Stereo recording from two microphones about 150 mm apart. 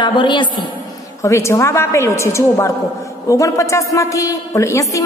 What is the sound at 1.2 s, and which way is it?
A woman's voice, 20° left (ahead or behind).